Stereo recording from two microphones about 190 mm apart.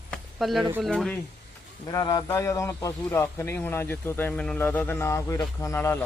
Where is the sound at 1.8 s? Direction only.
20° left (ahead or behind).